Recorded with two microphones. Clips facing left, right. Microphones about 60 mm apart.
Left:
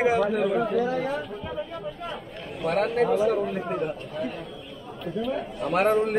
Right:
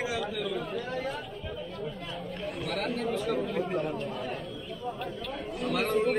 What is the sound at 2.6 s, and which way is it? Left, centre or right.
Speech, left.